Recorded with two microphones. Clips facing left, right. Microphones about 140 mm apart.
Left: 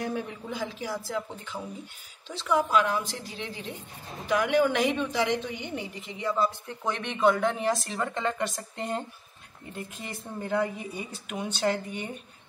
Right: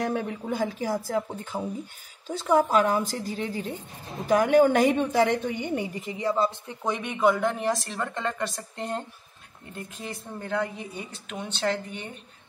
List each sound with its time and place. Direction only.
0.0 s a woman's voice: 55° right (ahead or behind); by 6.5 s 30° right (ahead or behind)
6.7 s a woman's voice: 15° right (ahead or behind); by 12.1 s 10° left (ahead or behind)